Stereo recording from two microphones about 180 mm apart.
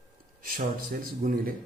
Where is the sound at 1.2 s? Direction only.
45° right (ahead or behind).